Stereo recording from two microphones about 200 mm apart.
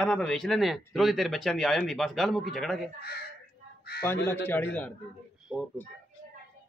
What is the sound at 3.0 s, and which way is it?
Speech, 55° left (ahead or behind).